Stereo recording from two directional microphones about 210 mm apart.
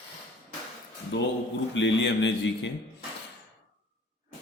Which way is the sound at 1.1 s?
60° left (ahead or behind).